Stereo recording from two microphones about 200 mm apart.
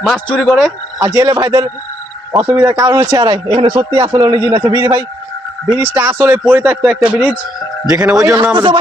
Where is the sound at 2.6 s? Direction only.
15° right (ahead or behind).